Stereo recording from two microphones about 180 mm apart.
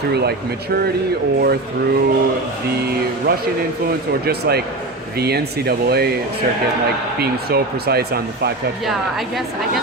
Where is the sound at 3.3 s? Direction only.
55° right (ahead or behind).